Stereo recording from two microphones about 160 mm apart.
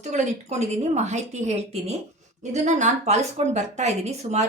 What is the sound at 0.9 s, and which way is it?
A woman's voice, 45° right (ahead or behind).